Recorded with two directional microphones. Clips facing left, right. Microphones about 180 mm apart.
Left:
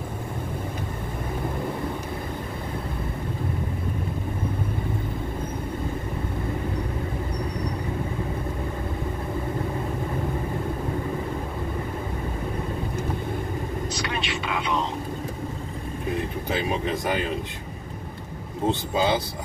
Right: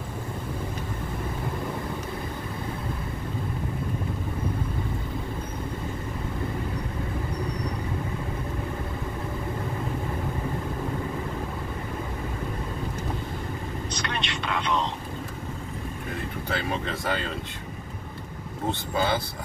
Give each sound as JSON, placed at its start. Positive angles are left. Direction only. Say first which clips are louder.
{"t": 13.9, "sound": "a sound", "louder": "left 3 dB", "side_deg": 5}
{"t": 16.4, "sound": "speech", "louder": "left 3 dB", "side_deg": 15}
{"t": 18.7, "sound": "speech", "louder": "left 3 dB", "side_deg": 20}